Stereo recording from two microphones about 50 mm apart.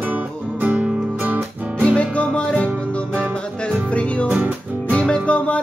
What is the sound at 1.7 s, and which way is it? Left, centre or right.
Music, left.